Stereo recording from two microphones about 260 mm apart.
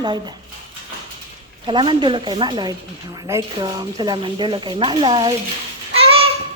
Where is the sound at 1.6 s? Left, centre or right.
Centre.